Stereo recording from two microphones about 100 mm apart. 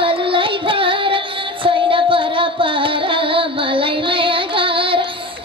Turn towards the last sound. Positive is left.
turn(degrees=-60)  # may be behind; listen again after turning